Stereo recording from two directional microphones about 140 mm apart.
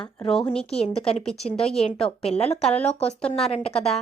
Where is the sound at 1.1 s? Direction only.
50° left (ahead or behind).